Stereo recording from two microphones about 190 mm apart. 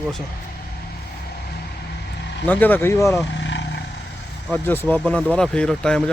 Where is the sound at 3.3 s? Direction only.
70° left (ahead or behind).